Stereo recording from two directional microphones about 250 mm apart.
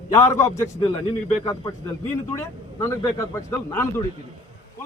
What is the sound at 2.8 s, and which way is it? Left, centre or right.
A man's voice, centre.